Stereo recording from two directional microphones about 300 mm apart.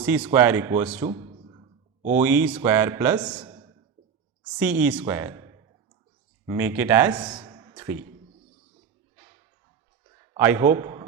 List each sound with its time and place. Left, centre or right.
0.0 s speech: centre
1.0 s a man's voice: centre
2.1 s speech: centre
3.4 s a sound: centre
4.5 s speech: centre
7.3 s a sound: centre
10.3 s a man's voice: centre